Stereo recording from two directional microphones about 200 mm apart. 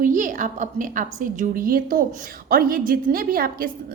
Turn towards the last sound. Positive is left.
turn(degrees=-45)  # may be behind; listen again after turning